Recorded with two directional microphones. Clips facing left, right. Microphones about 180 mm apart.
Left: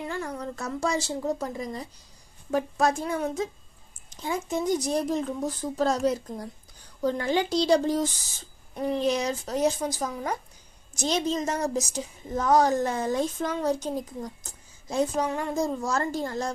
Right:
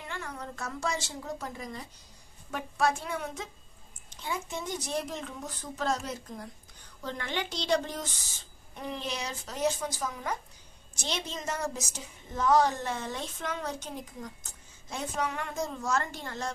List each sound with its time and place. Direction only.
0.0 s a woman's voice: 35° left (ahead or behind)